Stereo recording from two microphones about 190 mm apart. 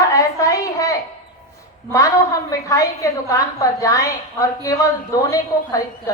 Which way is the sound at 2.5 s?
15° left (ahead or behind).